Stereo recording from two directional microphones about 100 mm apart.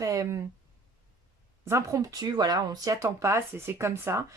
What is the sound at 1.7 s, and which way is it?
Speech, 30° right (ahead or behind).